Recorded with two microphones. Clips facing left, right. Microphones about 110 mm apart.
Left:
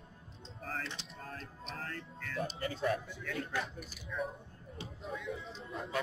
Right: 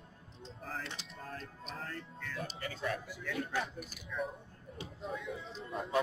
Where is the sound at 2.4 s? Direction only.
35° left (ahead or behind).